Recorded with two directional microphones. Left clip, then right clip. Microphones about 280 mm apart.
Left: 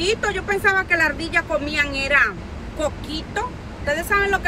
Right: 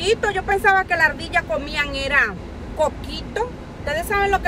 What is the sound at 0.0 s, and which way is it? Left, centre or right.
Speech, centre.